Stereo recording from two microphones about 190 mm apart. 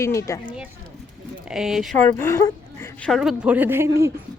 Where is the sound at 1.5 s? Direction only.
Centre (ahead or behind).